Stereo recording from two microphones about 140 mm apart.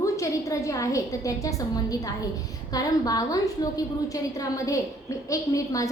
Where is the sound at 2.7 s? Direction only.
25° left (ahead or behind).